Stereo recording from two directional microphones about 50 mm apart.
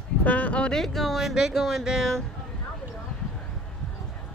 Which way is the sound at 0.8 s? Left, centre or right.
Centre.